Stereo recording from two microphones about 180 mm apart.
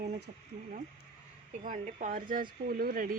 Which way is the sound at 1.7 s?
50° right (ahead or behind).